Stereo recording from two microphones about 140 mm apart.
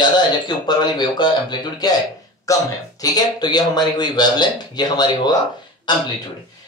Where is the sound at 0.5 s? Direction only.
30° left (ahead or behind).